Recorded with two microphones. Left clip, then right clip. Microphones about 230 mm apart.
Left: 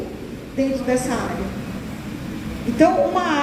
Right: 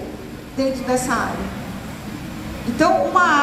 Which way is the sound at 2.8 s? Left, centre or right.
Right.